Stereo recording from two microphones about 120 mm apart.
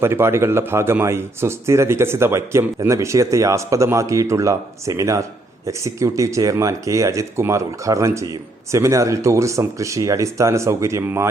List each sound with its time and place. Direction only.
0.0 s speech: 20° right (ahead or behind)